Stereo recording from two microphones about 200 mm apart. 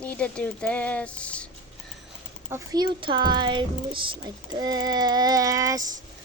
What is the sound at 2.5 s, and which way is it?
Speech, 20° right (ahead or behind).